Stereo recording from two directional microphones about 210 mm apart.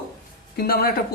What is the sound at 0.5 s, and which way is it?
Speech, 45° left (ahead or behind).